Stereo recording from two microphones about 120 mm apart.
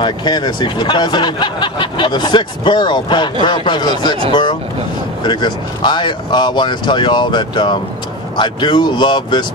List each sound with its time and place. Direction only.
0.0 s speech: 40° left (ahead or behind)